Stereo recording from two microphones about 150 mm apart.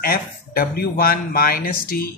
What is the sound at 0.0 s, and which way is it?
Speech, 85° left.